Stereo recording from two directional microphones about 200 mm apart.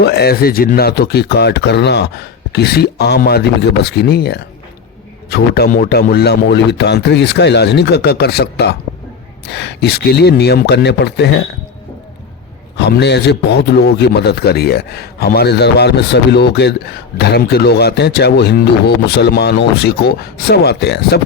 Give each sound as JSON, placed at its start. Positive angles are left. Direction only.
{"t": 0.0, "sound": "a man's voice", "side_deg": 55}
{"t": 12.7, "sound": "a man's voice", "side_deg": 60}